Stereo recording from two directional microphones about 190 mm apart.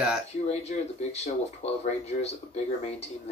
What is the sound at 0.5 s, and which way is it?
Speech, 35° left (ahead or behind).